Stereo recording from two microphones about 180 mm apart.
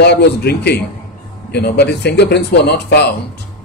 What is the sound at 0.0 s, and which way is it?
Speech, 70° left (ahead or behind).